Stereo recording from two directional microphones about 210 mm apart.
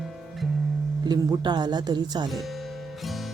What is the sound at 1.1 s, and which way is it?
Speech, 20° right (ahead or behind).